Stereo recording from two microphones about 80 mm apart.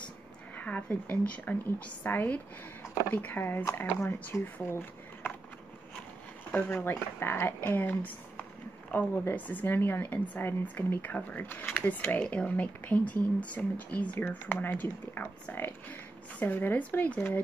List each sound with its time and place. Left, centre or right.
0.6 s a woman's voice: centre
6.5 s a woman's voice: left